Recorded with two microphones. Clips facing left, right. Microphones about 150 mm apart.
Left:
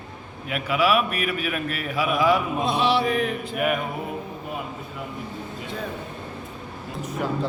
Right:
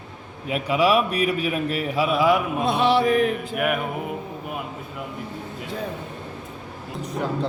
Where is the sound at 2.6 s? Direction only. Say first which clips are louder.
Right 4 dB; 50° right (ahead or behind).